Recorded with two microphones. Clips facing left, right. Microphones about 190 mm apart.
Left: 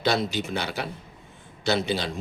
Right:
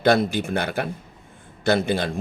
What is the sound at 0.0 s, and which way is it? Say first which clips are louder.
A man's voice: right 6 dB; 55° right (ahead or behind).